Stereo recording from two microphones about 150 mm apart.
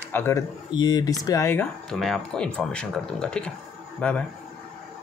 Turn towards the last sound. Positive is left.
turn(degrees=10)  # may be behind; listen again after turning